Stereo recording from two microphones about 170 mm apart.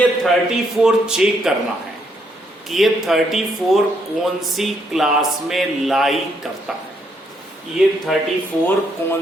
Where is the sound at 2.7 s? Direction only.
Centre (ahead or behind).